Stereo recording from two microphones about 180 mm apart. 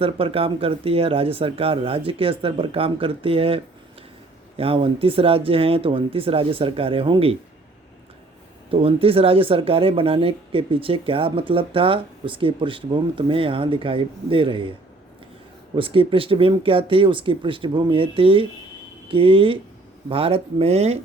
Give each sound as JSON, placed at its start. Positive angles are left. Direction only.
{"t": 0.0, "sound": "speech", "side_deg": -30}
{"t": 8.7, "sound": "speech", "side_deg": -30}
{"t": 15.7, "sound": "speech", "side_deg": -30}